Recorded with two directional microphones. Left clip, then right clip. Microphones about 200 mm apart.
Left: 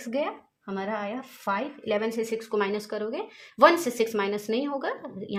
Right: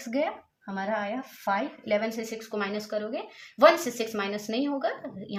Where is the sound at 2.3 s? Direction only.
45° left (ahead or behind).